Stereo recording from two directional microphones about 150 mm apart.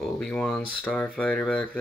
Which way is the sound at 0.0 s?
5° left (ahead or behind).